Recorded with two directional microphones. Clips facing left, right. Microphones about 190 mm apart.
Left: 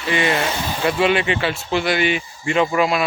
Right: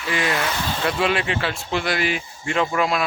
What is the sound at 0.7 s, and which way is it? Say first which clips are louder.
Speech: left 5 dB; centre (ahead or behind).